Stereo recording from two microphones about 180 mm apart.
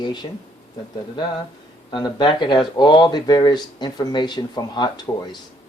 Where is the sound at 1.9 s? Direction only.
25° left (ahead or behind).